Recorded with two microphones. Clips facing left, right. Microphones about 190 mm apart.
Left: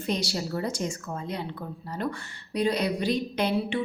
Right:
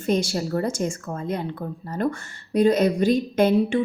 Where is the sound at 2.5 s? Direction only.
45° right (ahead or behind).